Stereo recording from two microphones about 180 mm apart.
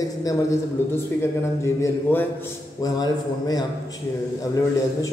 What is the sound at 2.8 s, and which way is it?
Speech, 20° left (ahead or behind).